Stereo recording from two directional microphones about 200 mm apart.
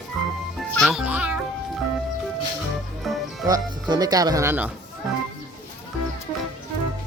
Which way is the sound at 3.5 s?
20° right (ahead or behind).